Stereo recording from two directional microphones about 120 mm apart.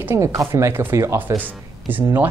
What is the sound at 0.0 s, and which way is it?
Speech, 25° right (ahead or behind).